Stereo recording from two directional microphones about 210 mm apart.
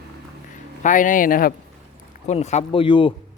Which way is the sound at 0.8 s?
35° left (ahead or behind).